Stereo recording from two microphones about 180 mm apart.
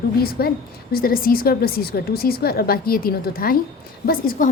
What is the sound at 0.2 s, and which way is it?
A woman's voice, 55° left (ahead or behind).